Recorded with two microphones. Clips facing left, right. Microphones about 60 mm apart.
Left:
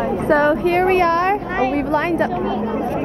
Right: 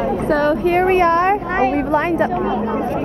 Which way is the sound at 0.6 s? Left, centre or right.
Centre.